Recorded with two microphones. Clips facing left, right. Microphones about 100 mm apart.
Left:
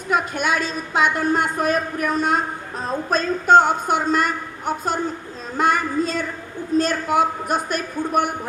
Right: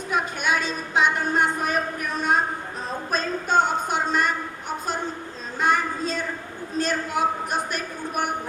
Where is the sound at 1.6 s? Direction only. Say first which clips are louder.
Left 5 dB; 65° left (ahead or behind).